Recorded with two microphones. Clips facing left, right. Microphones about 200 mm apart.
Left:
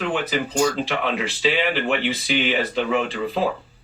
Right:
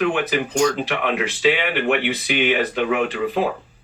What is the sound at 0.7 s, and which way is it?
A man's voice, 15° right (ahead or behind).